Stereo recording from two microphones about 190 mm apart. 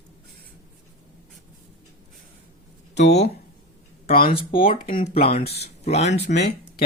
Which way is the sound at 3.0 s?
65° left (ahead or behind).